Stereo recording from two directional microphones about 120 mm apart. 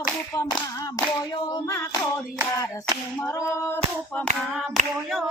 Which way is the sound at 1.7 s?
25° left (ahead or behind).